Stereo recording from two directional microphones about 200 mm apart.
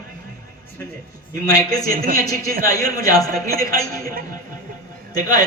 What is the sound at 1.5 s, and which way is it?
A man's voice, 20° left (ahead or behind).